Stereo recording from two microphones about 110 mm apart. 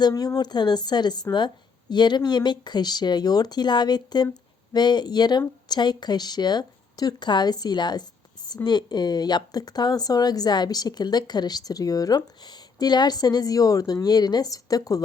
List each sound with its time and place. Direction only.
0.0 s a woman's voice: 35° left (ahead or behind)